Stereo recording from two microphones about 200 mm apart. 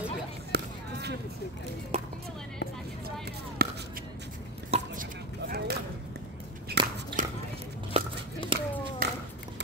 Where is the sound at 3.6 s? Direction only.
50° right (ahead or behind).